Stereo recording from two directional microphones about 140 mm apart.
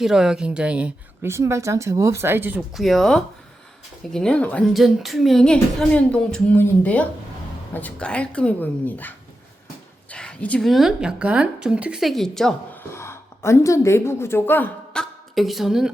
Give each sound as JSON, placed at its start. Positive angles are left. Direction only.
{"t": 0.0, "sound": "a woman's voice", "side_deg": -5}
{"t": 2.7, "sound": "a woman's voice", "side_deg": 0}
{"t": 12.9, "sound": "speech", "side_deg": 20}
{"t": 15.4, "sound": "a woman's voice", "side_deg": 0}